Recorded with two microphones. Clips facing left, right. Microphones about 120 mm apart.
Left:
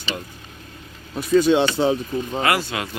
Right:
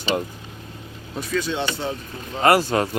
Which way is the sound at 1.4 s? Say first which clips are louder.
Left 9 dB; 70° left (ahead or behind).